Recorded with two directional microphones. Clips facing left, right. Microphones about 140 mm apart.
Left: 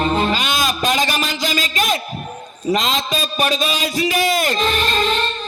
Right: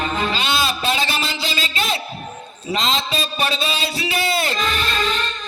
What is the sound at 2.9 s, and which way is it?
Speech, 40° left (ahead or behind).